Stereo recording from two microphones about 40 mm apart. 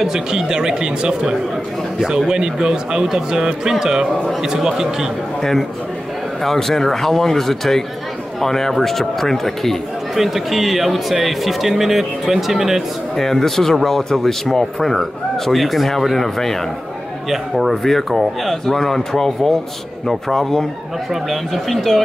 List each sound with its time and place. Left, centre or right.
0.1 s speech: centre
5.4 s speech: centre
10.1 s speech: centre
13.1 s speech: centre
17.3 s speech: centre